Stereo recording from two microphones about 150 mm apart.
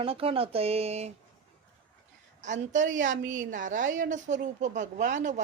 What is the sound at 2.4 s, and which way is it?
A woman's voice, 55° right (ahead or behind).